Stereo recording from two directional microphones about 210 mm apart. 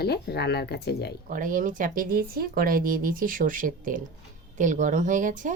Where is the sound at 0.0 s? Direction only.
50° left (ahead or behind).